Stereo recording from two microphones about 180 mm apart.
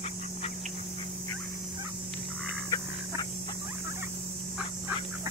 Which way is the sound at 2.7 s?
20° left (ahead or behind).